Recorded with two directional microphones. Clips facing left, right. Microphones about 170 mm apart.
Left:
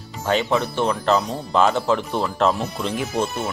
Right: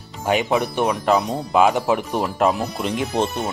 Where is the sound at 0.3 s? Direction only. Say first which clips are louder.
Right 1 dB; 15° right (ahead or behind).